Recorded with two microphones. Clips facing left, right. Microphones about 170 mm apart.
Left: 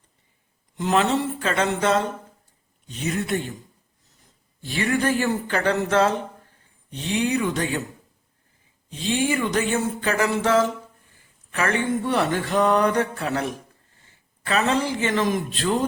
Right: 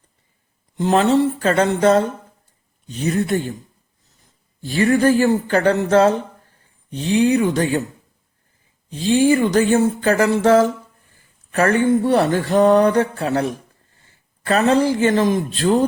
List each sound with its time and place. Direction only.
0.8 s speech: 35° right (ahead or behind)
4.6 s speech: 40° right (ahead or behind)
8.9 s speech: 35° right (ahead or behind)